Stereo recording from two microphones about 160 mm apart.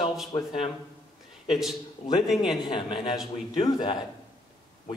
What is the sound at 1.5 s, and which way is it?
Speech, centre (ahead or behind).